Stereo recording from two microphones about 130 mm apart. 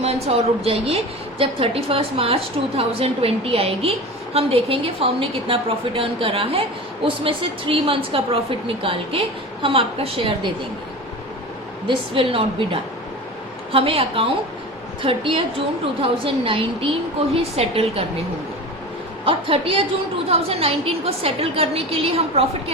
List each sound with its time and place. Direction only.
0.0 s a woman's voice: 50° right (ahead or behind)
11.9 s a woman's voice: 45° right (ahead or behind)
19.2 s a woman's voice: 45° right (ahead or behind)